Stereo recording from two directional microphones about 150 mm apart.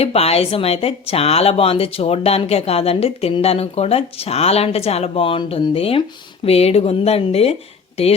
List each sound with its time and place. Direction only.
0.0 s speech: 40° left (ahead or behind)